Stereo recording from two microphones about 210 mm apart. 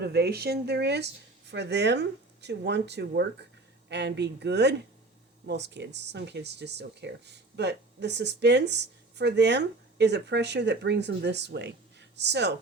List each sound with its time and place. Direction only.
0.0 s speech: 50° right (ahead or behind)